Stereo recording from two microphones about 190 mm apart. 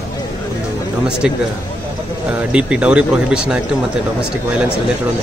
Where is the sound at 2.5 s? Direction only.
5° right (ahead or behind).